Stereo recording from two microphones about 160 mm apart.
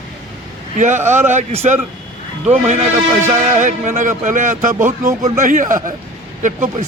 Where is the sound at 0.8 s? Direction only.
50° right (ahead or behind).